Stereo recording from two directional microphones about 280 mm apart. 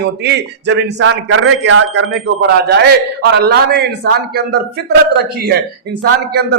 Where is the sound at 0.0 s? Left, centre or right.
Right.